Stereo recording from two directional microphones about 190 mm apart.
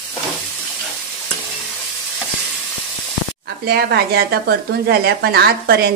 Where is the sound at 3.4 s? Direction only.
60° right (ahead or behind).